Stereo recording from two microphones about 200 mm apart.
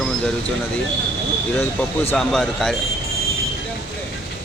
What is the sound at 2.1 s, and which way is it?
Speech, centre (ahead or behind).